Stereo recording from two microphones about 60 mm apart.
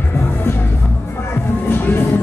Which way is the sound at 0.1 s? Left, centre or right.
Left.